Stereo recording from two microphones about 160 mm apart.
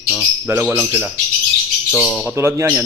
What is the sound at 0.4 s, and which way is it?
Speech, 15° right (ahead or behind).